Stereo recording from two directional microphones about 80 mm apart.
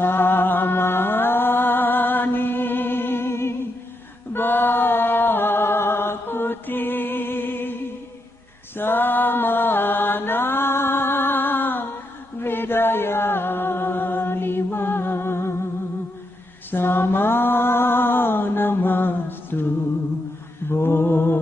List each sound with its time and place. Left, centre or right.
0.0 s mantra: left
4.3 s music: left
8.7 s mantra: left
12.4 s music: left
16.7 s mantra: left
20.6 s mantra: left